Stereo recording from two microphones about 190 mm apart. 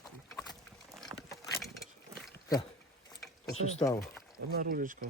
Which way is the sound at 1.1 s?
15° right (ahead or behind).